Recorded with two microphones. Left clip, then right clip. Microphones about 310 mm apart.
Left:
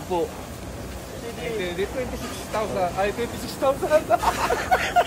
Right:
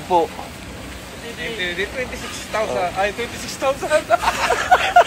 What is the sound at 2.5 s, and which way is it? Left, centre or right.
Speech, centre.